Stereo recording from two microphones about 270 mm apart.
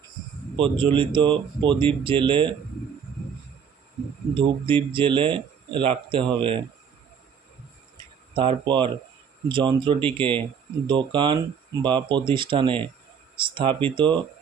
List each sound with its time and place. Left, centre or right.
0.5 s speech: centre
4.4 s speech: centre
8.4 s speech: centre